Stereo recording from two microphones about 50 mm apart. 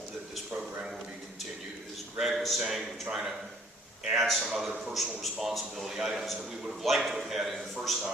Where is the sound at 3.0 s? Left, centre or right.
Centre.